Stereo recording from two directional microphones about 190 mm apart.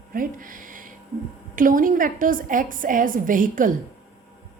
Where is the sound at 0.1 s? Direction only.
45° right (ahead or behind).